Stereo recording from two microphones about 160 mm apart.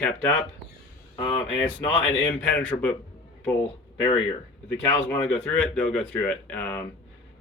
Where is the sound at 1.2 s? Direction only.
35° left (ahead or behind).